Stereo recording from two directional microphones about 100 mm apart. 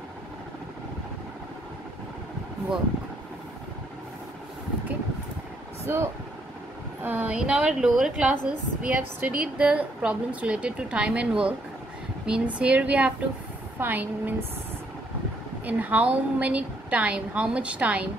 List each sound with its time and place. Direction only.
5.9 s a woman's voice: 25° right (ahead or behind)
15.6 s a woman's voice: 15° right (ahead or behind)